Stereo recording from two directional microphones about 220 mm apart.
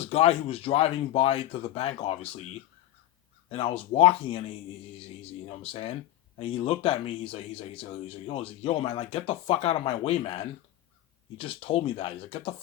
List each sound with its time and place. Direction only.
0.0 s speech: 25° left (ahead or behind)